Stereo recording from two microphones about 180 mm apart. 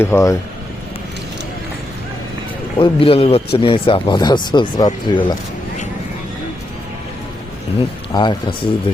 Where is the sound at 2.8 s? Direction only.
30° left (ahead or behind).